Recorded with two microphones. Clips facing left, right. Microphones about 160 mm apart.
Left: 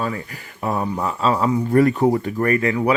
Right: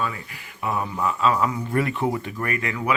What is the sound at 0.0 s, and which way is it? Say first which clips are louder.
Speech: left 4 dB; 40° left (ahead or behind).